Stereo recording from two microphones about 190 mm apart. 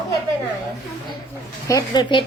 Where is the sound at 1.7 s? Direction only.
20° left (ahead or behind).